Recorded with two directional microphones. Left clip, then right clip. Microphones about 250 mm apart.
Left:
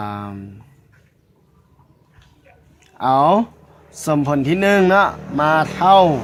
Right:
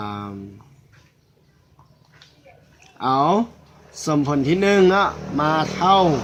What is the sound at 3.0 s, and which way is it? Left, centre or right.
Speech, left.